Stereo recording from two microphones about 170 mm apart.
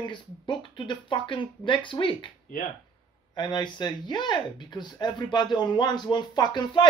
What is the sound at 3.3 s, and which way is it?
Speech, 25° left (ahead or behind).